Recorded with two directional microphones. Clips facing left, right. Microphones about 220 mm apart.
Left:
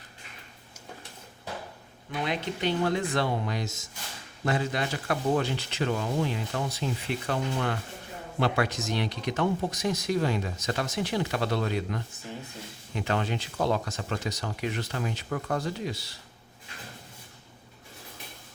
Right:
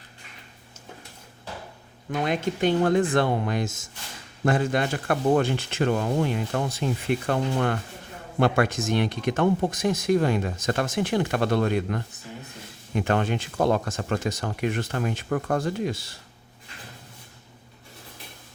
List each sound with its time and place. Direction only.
2.1 s speech: 50° right (ahead or behind)